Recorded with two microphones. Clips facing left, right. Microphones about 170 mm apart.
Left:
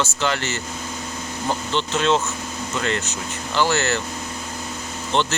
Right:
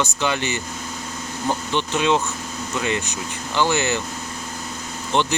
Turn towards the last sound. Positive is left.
turn(degrees=-15)  # may be behind; listen again after turning